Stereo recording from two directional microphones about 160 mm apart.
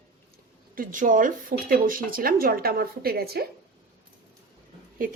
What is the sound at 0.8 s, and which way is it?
Speech, 55° right (ahead or behind).